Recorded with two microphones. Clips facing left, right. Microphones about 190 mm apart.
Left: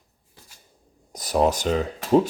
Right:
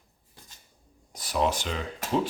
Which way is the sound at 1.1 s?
40° left (ahead or behind).